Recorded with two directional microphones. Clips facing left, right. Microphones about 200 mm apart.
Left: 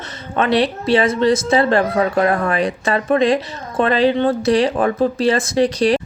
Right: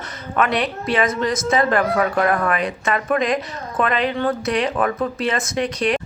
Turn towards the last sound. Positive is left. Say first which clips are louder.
# left 6 dB
turn(degrees=30)  # may be behind; listen again after turning